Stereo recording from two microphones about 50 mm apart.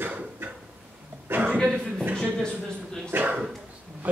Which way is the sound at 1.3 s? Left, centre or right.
Right.